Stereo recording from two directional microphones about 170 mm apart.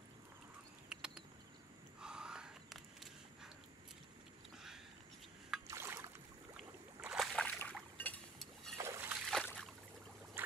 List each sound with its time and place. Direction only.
0.8 s insect: 5° right (ahead or behind)
2.0 s gasp: 5° right (ahead or behind)
5.7 s boat: 15° right (ahead or behind)
6.5 s boat: 5° right (ahead or behind)
8.0 s a sound: centre (ahead or behind)
8.7 s splash: 15° right (ahead or behind)
9.2 s boat: centre (ahead or behind)
10.4 s boat: 10° right (ahead or behind)